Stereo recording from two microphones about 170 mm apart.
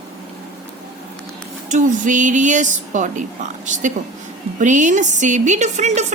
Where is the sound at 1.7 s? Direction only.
50° right (ahead or behind).